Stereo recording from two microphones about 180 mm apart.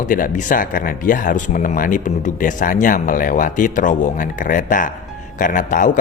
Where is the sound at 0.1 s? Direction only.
45° left (ahead or behind).